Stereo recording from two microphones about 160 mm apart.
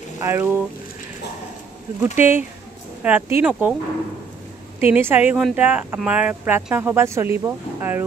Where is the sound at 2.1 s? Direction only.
15° right (ahead or behind).